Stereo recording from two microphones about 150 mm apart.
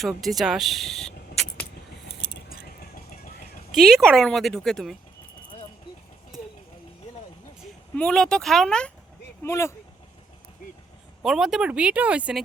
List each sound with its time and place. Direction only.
0.0 s speech: centre (ahead or behind)
3.7 s speech: centre (ahead or behind)
7.9 s speech: 5° left (ahead or behind)
9.4 s speech: 15° left (ahead or behind)
11.2 s speech: centre (ahead or behind)